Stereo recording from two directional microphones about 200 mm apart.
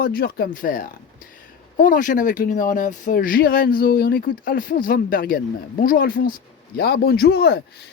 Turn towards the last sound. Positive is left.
turn(degrees=50)  # may be behind; listen again after turning